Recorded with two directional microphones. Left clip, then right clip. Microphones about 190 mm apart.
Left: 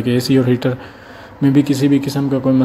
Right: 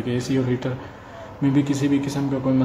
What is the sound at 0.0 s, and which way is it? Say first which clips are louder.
Speech: left 9 dB; 30° left (ahead or behind).